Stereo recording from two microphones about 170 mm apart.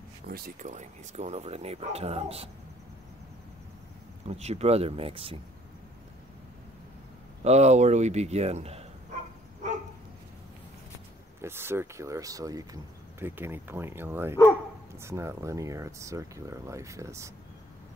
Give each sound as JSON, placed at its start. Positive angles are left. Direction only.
{"t": 0.3, "sound": "speech", "side_deg": -45}
{"t": 4.3, "sound": "speech", "side_deg": -40}
{"t": 7.4, "sound": "speech", "side_deg": -40}
{"t": 11.4, "sound": "speech", "side_deg": -15}